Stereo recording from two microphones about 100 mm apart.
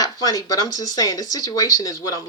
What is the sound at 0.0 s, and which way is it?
A woman's voice, 40° left (ahead or behind).